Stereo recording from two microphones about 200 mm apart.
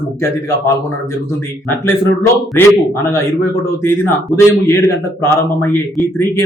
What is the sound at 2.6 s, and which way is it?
Speech, 10° left (ahead or behind).